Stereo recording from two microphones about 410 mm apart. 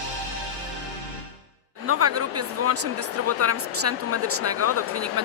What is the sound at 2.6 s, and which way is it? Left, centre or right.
Speech, right.